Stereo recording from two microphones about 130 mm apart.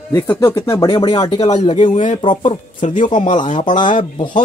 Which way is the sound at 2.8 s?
70° left (ahead or behind).